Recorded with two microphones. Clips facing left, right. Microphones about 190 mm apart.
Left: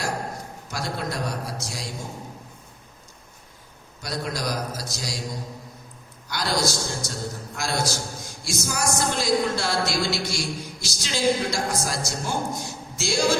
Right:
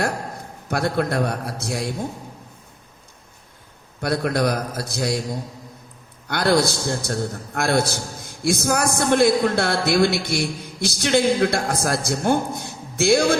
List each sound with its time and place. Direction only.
0.7 s a man's voice: 60° right (ahead or behind)
4.0 s a man's voice: 60° right (ahead or behind)